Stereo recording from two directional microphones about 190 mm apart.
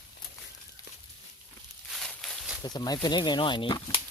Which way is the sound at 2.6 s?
20° left (ahead or behind).